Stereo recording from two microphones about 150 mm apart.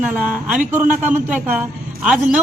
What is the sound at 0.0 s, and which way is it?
A man's voice, 10° right (ahead or behind).